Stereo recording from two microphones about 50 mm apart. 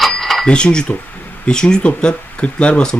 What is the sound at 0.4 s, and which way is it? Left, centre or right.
A man's voice, centre.